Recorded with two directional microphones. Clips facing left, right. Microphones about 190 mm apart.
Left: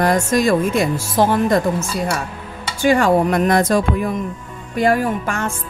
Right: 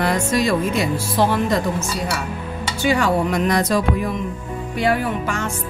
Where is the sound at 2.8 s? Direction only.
50° left (ahead or behind).